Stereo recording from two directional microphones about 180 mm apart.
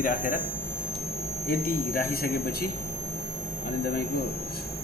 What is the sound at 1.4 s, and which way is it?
Speech, 55° left (ahead or behind).